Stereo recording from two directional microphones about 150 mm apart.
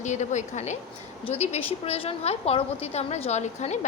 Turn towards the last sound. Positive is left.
turn(degrees=50)  # may be behind; listen again after turning